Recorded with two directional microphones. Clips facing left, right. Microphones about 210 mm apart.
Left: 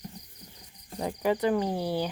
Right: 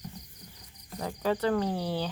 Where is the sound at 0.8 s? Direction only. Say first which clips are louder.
Left 2 dB; 20° left (ahead or behind).